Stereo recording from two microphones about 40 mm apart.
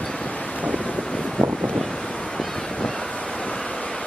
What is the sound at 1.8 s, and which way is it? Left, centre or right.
Waves, centre.